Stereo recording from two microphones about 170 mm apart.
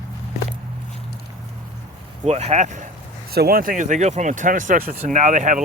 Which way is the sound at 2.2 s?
40° right (ahead or behind).